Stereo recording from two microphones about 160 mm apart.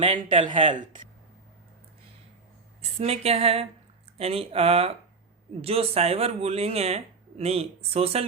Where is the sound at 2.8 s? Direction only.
40° right (ahead or behind).